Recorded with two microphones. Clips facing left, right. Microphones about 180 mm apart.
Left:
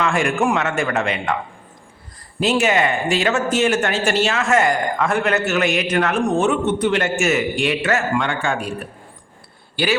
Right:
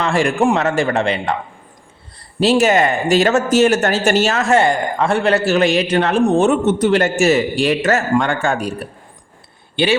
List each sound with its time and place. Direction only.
0.0 s speech: 35° right (ahead or behind)
2.4 s speech: 35° right (ahead or behind)
9.7 s a man's voice: 25° right (ahead or behind)